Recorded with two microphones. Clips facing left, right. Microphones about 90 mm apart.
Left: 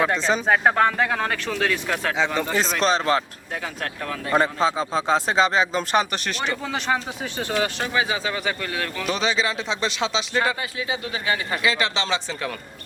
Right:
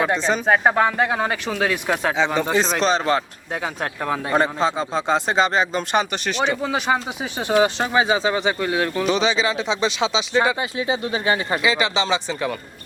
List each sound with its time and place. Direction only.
0.0 s speech: centre (ahead or behind)
2.1 s speech: centre (ahead or behind)
3.5 s speech: 20° right (ahead or behind)
4.4 s speech: centre (ahead or behind)
6.6 s speech: 10° right (ahead or behind)
9.0 s speech: centre (ahead or behind)
10.6 s speech: 25° right (ahead or behind)
11.6 s speech: 5° right (ahead or behind)